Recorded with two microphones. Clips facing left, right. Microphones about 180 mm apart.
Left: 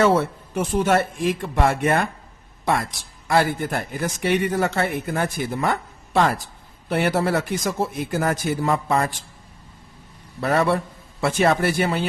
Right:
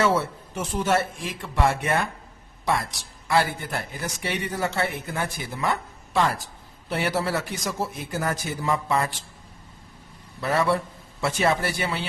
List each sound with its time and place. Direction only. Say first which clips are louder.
0.0 s a man's voice: left 4 dB; 60° left (ahead or behind)
3.2 s a man's voice: left 3 dB; 50° left (ahead or behind)
6.8 s a man's voice: left 5 dB; 55° left (ahead or behind)
10.4 s a man's voice: left 3 dB; 60° left (ahead or behind)